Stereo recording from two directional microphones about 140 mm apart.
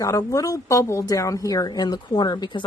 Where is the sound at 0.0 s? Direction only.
25° left (ahead or behind).